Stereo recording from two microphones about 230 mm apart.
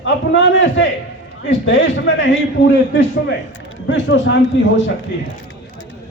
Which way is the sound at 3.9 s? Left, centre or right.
Left.